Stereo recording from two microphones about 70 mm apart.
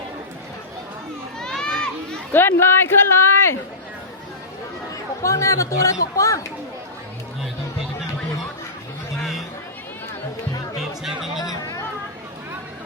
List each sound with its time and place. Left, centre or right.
1.4 s crowd: centre
2.3 s a man's voice: left
5.2 s speech: left
11.0 s music: centre
11.4 s chatter: left